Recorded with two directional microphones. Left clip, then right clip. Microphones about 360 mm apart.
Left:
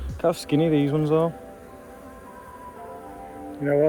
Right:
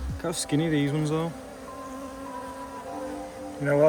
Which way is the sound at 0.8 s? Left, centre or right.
Centre.